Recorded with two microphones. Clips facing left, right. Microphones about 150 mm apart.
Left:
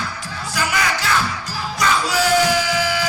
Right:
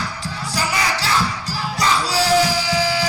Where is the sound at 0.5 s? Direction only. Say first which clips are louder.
Left 1 dB; 35° right (ahead or behind).